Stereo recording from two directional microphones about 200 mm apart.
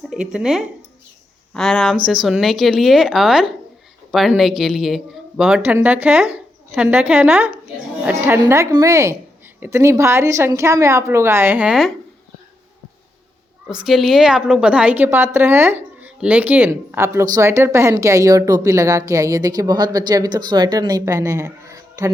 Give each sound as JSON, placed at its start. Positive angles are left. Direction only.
{"t": 0.1, "sound": "a woman's voice", "side_deg": -5}
{"t": 13.7, "sound": "a woman's voice", "side_deg": 0}